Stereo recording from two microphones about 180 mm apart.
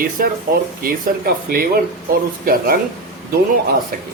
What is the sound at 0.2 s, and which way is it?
Speech, 50° right (ahead or behind).